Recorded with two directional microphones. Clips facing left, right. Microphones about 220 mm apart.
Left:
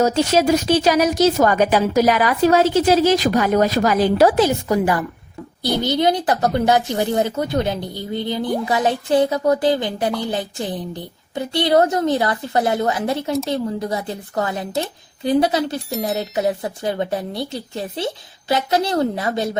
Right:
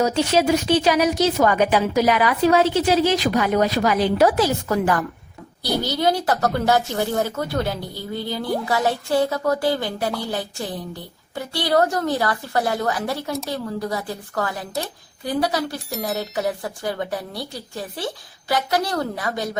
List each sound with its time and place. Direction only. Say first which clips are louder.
0.0 s a woman's voice: left 3 dB; 45° left (ahead or behind)
4.3 s a woman's voice: left 3 dB; 20° left (ahead or behind)